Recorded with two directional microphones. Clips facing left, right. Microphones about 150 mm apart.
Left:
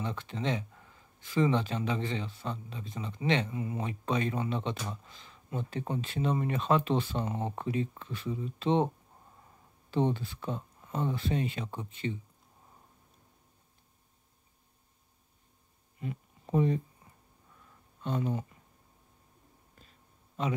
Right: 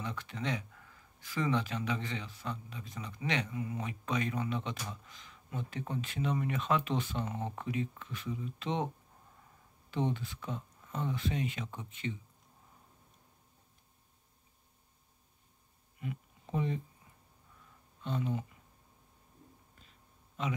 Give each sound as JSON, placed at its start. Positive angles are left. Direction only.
{"t": 0.0, "sound": "speech", "side_deg": 30}
{"t": 16.0, "sound": "a sound", "side_deg": 40}
{"t": 18.0, "sound": "speech", "side_deg": 45}